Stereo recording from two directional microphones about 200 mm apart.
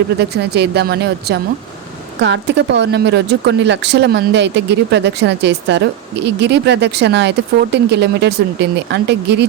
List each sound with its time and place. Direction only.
0.2 s speech: 55° right (ahead or behind)